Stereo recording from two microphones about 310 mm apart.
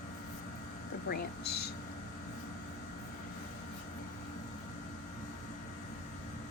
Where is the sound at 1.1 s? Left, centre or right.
Left.